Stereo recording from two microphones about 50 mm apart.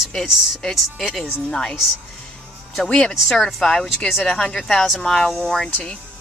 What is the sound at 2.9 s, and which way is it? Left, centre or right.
Speech, left.